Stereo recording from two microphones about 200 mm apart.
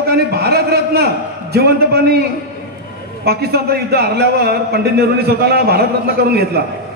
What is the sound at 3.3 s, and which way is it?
A man's voice, 50° right (ahead or behind).